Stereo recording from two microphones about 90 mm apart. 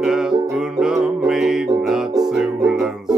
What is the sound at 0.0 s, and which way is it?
Music, 5° right (ahead or behind).